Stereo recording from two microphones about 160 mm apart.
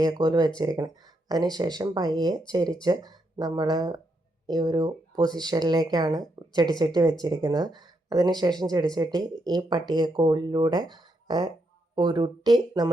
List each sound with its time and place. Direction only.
0.0 s speech: 25° right (ahead or behind)